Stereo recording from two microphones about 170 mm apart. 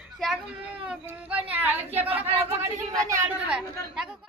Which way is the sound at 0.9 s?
10° right (ahead or behind).